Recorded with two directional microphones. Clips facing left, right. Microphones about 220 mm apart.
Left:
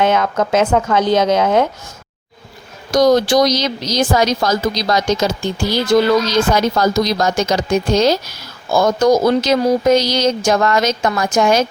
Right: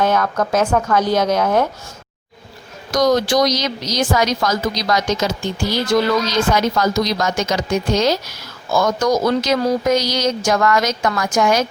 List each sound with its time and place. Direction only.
0.0 s speech: 20° left (ahead or behind)
2.9 s speech: 30° left (ahead or behind)